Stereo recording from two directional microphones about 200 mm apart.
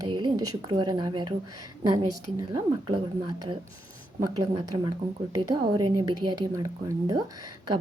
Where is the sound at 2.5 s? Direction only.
25° right (ahead or behind).